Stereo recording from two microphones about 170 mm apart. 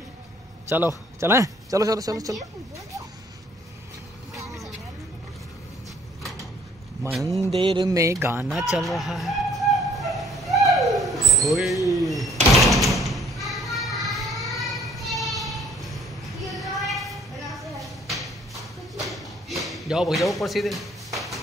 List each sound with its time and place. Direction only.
1.2 s speech: 15° right (ahead or behind)
7.1 s speech: centre (ahead or behind)
7.5 s speech: 30° right (ahead or behind)
8.0 s speech: 15° right (ahead or behind)
8.7 s a sound: centre (ahead or behind)
12.0 s speech: centre (ahead or behind)
12.5 s a sound: centre (ahead or behind)